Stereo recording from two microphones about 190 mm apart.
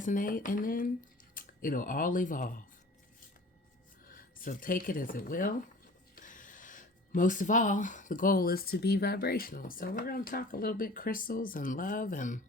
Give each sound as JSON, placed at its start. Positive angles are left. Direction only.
{"t": 0.0, "sound": "speech", "side_deg": 45}
{"t": 4.0, "sound": "speech", "side_deg": 45}